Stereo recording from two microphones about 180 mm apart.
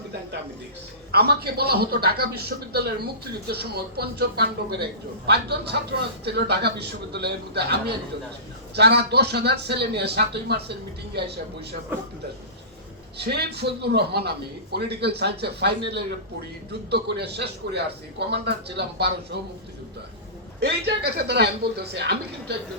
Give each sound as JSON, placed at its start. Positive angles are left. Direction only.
{"t": 1.1, "sound": "speech", "side_deg": -60}
{"t": 13.1, "sound": "a man's voice", "side_deg": -65}
{"t": 20.6, "sound": "speech", "side_deg": -65}